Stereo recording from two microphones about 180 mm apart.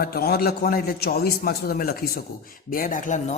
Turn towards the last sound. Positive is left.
turn(degrees=45)  # may be behind; listen again after turning